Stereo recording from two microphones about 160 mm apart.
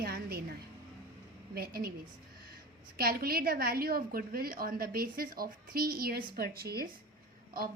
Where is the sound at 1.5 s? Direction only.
70° right (ahead or behind).